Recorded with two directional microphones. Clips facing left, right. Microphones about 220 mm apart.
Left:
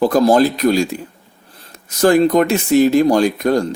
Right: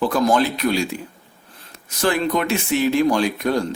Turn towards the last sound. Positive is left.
turn(degrees=45)  # may be behind; listen again after turning